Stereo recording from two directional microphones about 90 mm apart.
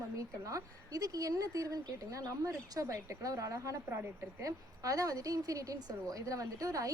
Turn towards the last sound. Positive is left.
turn(degrees=-40)  # may be behind; listen again after turning